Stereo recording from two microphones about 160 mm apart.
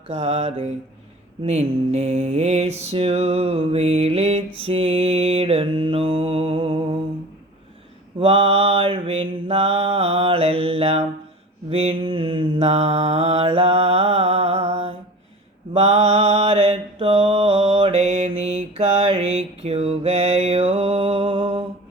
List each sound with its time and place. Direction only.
0.1 s mantra: 40° right (ahead or behind)
8.2 s mantra: 35° right (ahead or behind)